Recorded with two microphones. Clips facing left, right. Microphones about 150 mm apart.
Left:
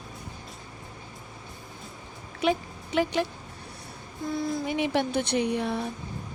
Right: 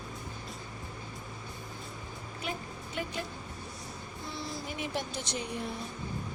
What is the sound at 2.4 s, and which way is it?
Music, 90° left.